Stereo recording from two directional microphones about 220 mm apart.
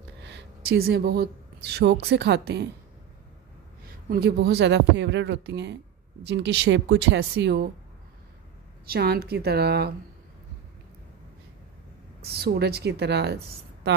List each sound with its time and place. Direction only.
0.2 s speech: 50° right (ahead or behind)
4.1 s speech: 45° right (ahead or behind)
8.8 s speech: 45° right (ahead or behind)
12.3 s speech: 45° right (ahead or behind)